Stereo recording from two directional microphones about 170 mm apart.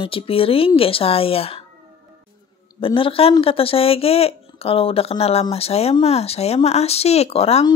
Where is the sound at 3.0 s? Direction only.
35° left (ahead or behind).